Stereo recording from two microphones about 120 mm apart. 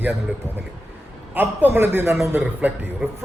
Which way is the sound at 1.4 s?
20° right (ahead or behind).